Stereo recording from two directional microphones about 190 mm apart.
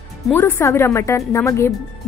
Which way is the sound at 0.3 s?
15° left (ahead or behind).